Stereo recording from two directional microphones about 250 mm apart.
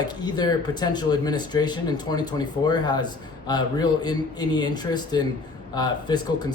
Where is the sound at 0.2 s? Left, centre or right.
Centre.